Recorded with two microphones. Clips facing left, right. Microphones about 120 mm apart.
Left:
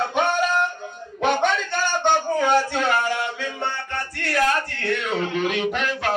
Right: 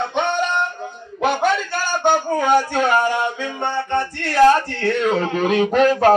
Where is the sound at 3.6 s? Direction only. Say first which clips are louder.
Right 10 dB; 20° right (ahead or behind).